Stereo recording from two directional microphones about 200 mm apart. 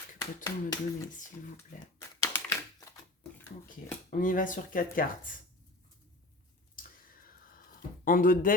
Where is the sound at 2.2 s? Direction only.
15° left (ahead or behind).